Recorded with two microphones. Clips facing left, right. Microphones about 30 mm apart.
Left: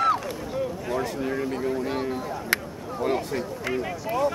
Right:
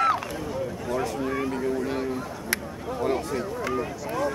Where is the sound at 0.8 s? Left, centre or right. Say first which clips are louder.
Even; centre.